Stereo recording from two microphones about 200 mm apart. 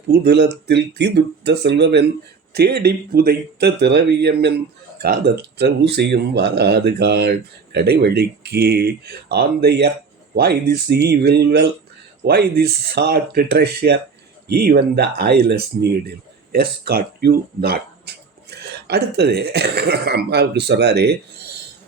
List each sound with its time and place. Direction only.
0.1 s speech: 55° right (ahead or behind)